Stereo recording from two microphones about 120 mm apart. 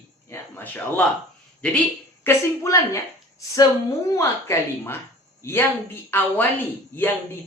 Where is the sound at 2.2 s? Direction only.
25° left (ahead or behind).